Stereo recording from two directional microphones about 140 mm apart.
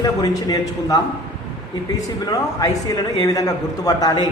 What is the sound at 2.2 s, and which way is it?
A man's voice, 25° left (ahead or behind).